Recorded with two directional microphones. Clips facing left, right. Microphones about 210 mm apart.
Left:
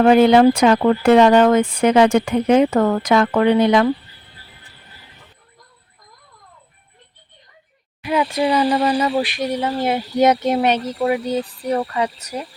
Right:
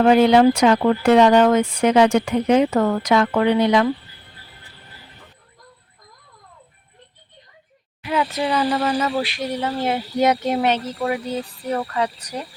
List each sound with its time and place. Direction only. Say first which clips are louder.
0.0 s speech: left 2 dB; 50° left (ahead or behind)
8.0 s speech: left 3 dB; 15° left (ahead or behind)